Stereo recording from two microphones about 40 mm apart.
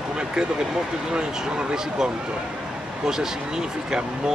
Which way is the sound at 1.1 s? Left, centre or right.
Right.